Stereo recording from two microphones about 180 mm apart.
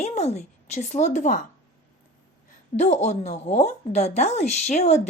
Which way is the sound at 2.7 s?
40° left (ahead or behind).